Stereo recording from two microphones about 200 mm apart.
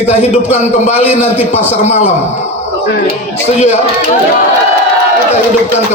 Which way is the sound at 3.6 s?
35° left (ahead or behind).